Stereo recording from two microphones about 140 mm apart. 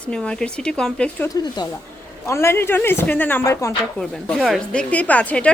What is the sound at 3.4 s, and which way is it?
Speech, 20° left (ahead or behind).